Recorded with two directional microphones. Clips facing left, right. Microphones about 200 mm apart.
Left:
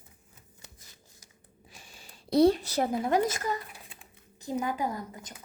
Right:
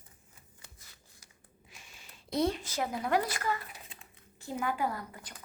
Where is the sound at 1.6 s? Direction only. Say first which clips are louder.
Left 4 dB; 35° left (ahead or behind).